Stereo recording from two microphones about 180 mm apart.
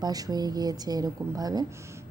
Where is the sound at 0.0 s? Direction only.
20° right (ahead or behind).